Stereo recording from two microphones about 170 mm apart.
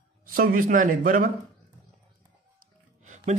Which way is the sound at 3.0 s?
45° right (ahead or behind).